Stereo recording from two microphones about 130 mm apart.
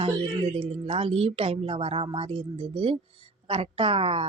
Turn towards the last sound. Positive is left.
turn(degrees=-45)  # may be behind; listen again after turning